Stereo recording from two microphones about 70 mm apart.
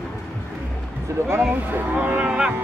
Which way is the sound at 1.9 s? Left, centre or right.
Right.